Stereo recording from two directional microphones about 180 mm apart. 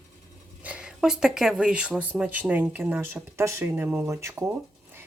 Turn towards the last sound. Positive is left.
turn(degrees=-15)  # may be behind; listen again after turning